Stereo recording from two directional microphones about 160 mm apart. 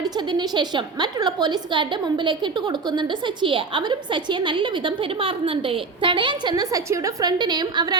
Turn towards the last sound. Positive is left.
turn(degrees=-25)  # may be behind; listen again after turning